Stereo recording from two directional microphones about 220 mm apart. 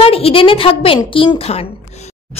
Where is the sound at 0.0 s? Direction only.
25° left (ahead or behind).